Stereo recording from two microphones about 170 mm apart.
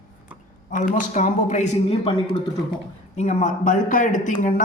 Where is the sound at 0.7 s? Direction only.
50° left (ahead or behind).